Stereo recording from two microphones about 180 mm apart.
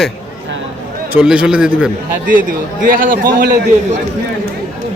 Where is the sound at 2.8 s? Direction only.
50° right (ahead or behind).